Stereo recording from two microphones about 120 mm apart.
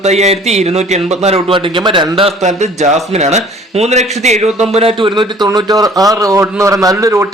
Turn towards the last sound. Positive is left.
turn(degrees=-20)  # may be behind; listen again after turning